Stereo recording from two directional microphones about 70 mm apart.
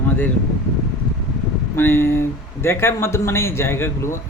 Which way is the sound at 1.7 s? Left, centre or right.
Left.